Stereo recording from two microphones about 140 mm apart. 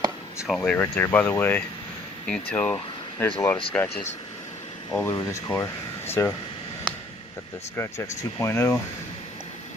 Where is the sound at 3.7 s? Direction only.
10° left (ahead or behind).